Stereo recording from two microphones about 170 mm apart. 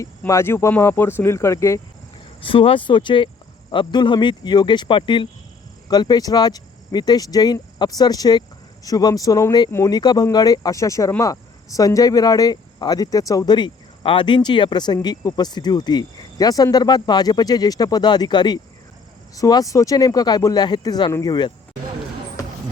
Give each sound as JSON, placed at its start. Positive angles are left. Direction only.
{"t": 0.0, "sound": "speech", "side_deg": 15}
{"t": 2.4, "sound": "speech", "side_deg": 30}